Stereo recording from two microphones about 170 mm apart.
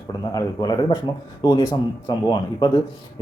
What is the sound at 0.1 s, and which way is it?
Speech, 25° left (ahead or behind).